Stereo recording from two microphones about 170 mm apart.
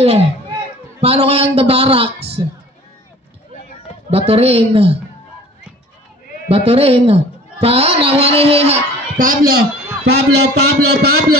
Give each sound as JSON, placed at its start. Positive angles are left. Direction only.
{"t": 0.0, "sound": "a man's voice", "side_deg": -35}
{"t": 4.1, "sound": "a man's voice", "side_deg": -35}
{"t": 6.5, "sound": "a man's voice", "side_deg": -35}
{"t": 9.2, "sound": "a man's voice", "side_deg": -55}